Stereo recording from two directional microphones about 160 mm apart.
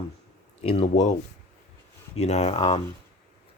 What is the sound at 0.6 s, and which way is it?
Speech, 40° left (ahead or behind).